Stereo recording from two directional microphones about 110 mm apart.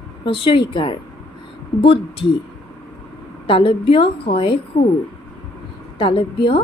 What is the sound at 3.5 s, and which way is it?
A woman's voice, 50° left (ahead or behind).